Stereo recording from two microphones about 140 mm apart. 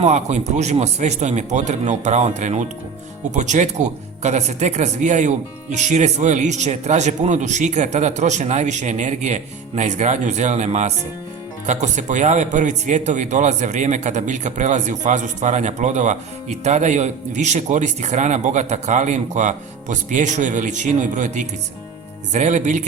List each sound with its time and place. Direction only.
0.0 s speech: 55° right (ahead or behind)